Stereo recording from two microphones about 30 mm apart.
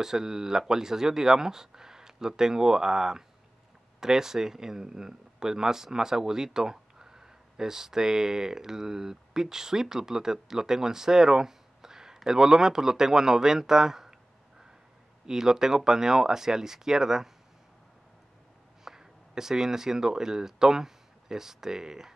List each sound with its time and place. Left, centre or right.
0.0 s speech: centre
15.2 s speech: centre
18.9 s speech: centre